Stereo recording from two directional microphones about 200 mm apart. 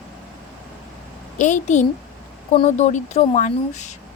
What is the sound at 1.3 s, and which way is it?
A woman's voice, 40° left (ahead or behind).